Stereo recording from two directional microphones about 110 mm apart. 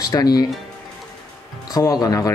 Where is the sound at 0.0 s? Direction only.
35° left (ahead or behind).